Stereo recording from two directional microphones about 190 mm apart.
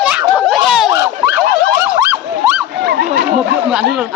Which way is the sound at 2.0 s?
10° right (ahead or behind).